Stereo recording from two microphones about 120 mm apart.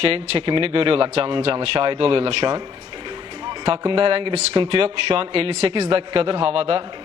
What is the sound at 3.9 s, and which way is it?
Speech, 50° right (ahead or behind).